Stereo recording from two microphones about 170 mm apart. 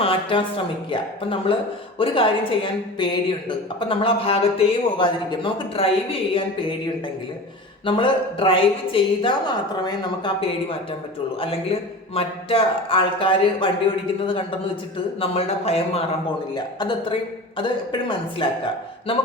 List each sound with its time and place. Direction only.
0.0 s speech: 30° left (ahead or behind)
3.8 s speech: 30° left (ahead or behind)
7.9 s a woman's voice: 30° left (ahead or behind)
15.2 s a woman's voice: 35° left (ahead or behind)